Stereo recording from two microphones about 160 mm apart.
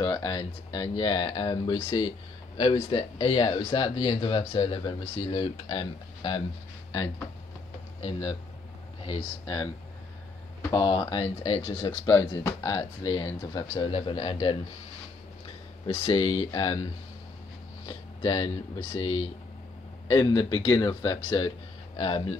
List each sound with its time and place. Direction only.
0.0 s speech: 25° left (ahead or behind)
8.0 s speech: 35° left (ahead or behind)
10.7 s speech: 25° left (ahead or behind)
15.9 s speech: 30° left (ahead or behind)
20.1 s speech: 25° left (ahead or behind)